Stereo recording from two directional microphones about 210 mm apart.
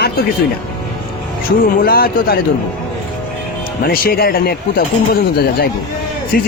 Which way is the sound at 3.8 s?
45° left (ahead or behind).